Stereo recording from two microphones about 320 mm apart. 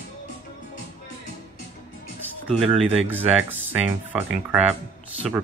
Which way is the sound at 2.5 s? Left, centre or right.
Centre.